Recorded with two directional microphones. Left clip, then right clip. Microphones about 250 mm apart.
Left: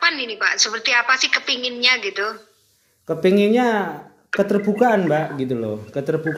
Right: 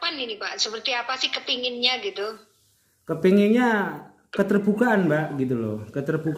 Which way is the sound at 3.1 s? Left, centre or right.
Centre.